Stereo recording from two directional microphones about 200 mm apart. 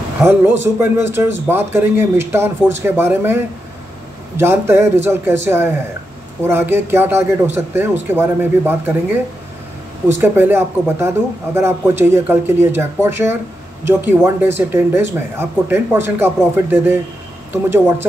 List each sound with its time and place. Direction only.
0.2 s speech: 10° right (ahead or behind)
4.4 s speech: 10° right (ahead or behind)